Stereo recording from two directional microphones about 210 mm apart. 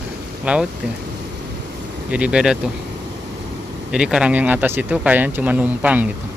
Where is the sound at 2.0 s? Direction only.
5° right (ahead or behind).